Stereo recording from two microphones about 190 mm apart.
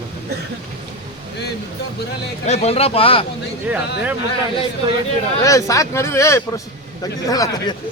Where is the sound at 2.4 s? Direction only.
35° left (ahead or behind).